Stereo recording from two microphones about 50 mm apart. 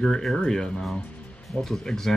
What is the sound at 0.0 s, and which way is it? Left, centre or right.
Speech, centre.